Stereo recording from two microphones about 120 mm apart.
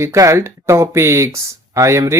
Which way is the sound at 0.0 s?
25° right (ahead or behind).